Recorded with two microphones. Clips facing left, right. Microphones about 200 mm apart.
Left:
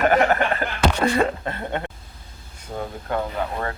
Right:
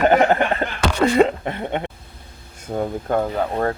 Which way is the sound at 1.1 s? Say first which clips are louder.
Right 5 dB; 20° right (ahead or behind).